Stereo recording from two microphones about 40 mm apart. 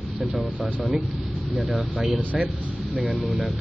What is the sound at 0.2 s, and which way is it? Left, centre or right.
Speech, centre.